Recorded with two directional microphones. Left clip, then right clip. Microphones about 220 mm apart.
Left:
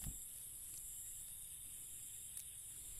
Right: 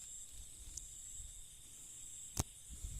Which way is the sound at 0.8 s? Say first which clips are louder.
Right 8 dB; 25° right (ahead or behind).